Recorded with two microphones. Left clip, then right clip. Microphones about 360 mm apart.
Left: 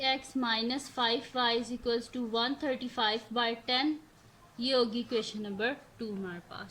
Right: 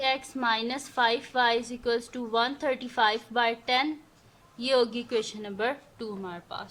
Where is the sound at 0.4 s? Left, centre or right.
Centre.